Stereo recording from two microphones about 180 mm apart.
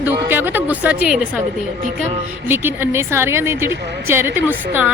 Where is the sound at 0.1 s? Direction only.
10° right (ahead or behind).